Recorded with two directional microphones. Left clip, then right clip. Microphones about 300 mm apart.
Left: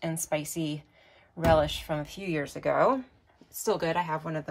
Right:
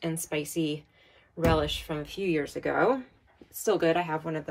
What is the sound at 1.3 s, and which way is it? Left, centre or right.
Speech, centre.